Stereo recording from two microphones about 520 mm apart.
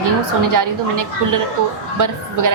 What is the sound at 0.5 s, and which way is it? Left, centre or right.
A woman's voice, right.